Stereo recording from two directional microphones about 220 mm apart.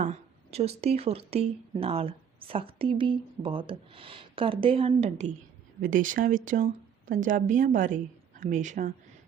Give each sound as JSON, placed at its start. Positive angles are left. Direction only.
{"t": 0.0, "sound": "speech", "side_deg": -30}